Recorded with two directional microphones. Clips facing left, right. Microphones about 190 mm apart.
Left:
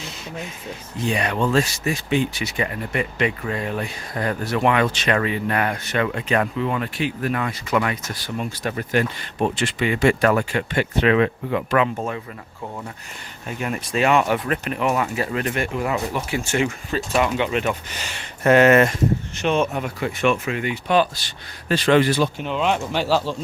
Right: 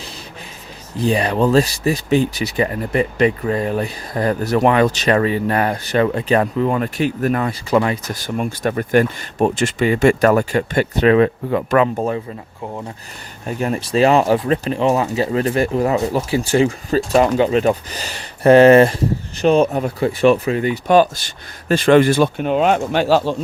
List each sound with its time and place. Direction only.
0.9 s speech: 35° right (ahead or behind)
8.1 s speech: 50° right (ahead or behind)
13.5 s speech: 35° right (ahead or behind); by 23.3 s 50° right (ahead or behind)